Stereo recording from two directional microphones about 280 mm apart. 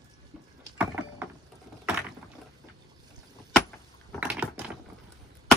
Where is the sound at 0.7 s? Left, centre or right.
Centre.